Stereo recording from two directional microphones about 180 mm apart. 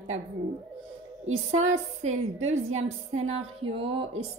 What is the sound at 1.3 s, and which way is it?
Speech, 90° right.